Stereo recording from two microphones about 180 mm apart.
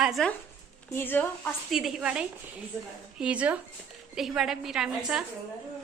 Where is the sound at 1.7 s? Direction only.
Centre (ahead or behind).